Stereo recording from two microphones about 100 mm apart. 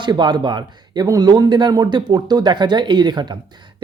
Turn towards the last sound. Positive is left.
turn(degrees=-45)  # may be behind; listen again after turning